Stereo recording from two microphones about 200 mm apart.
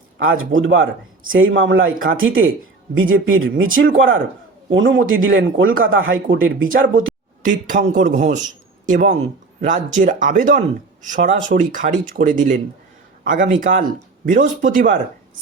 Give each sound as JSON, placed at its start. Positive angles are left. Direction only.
{"t": 0.2, "sound": "a man's voice", "side_deg": -85}
{"t": 3.8, "sound": "speech", "side_deg": -75}
{"t": 7.4, "sound": "speech", "side_deg": -40}